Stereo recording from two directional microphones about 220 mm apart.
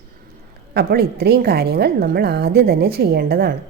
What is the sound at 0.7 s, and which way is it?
A woman's voice, 45° right (ahead or behind).